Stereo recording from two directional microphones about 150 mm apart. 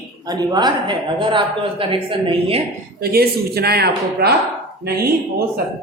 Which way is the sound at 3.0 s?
90° right.